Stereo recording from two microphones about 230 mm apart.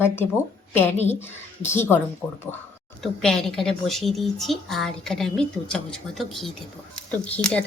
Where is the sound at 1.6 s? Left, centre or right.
Centre.